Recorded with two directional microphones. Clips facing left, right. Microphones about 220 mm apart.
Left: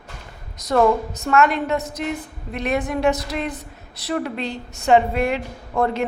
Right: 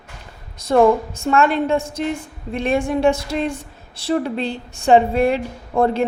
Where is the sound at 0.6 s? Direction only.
30° right (ahead or behind).